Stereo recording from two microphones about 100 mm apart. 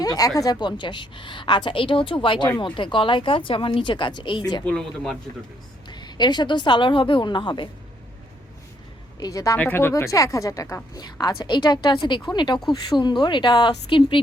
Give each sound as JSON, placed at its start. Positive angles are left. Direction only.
{"t": 0.0, "sound": "speech", "side_deg": 40}
{"t": 0.8, "sound": "speech", "side_deg": 55}
{"t": 4.6, "sound": "speech", "side_deg": 5}
{"t": 5.9, "sound": "a woman's voice", "side_deg": 45}
{"t": 9.2, "sound": "speech", "side_deg": 35}
{"t": 9.6, "sound": "speech", "side_deg": 20}
{"t": 9.9, "sound": "a woman's voice", "side_deg": 35}